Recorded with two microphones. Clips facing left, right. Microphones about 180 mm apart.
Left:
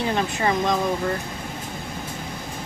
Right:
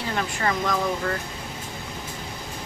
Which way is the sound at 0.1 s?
20° left (ahead or behind).